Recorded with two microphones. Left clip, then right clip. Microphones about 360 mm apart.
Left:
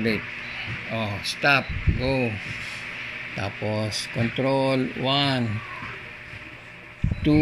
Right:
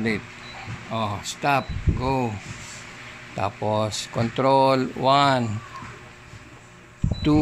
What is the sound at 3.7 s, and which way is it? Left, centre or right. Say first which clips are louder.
Speech: right 3 dB; right.